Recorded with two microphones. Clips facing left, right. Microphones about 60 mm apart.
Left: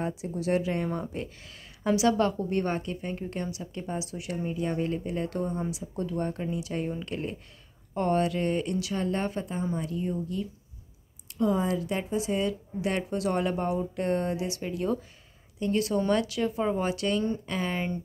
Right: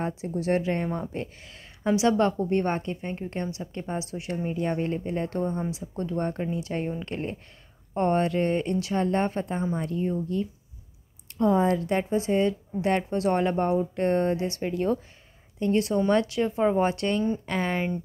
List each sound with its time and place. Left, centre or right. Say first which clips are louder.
0.2 s speech: right 2 dB; right
11.3 s speech: right 4 dB; right